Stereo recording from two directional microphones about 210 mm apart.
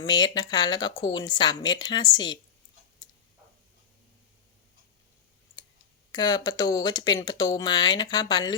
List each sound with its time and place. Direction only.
0.0 s speech: 20° left (ahead or behind)
6.1 s speech: 20° left (ahead or behind)